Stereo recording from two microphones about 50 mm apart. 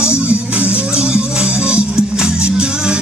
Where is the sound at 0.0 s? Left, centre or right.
Right.